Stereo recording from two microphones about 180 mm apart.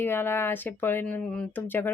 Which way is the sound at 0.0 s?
10° left (ahead or behind).